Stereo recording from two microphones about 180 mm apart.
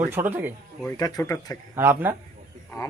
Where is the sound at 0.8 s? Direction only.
15° left (ahead or behind).